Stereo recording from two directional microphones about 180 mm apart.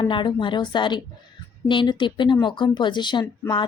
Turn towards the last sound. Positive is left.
turn(degrees=25)  # may be behind; listen again after turning